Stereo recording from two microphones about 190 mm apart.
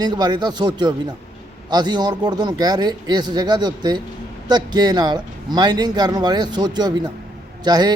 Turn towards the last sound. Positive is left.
turn(degrees=-20)  # may be behind; listen again after turning